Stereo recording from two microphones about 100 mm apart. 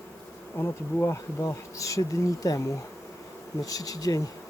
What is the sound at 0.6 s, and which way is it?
Bee, 25° left (ahead or behind).